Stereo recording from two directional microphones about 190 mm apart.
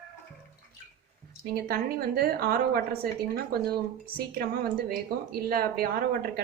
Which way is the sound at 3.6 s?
55° right (ahead or behind).